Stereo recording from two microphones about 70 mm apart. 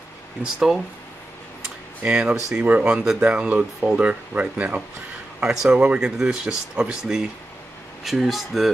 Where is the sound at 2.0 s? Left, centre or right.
Centre.